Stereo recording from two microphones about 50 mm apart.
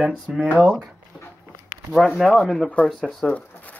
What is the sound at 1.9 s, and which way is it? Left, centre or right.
Speech, centre.